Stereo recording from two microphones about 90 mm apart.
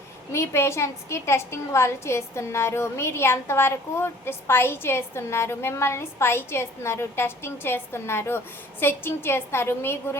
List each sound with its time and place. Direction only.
0.3 s a woman's voice: 30° left (ahead or behind)